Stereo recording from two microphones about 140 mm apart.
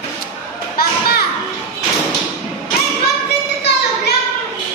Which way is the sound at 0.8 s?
90° left.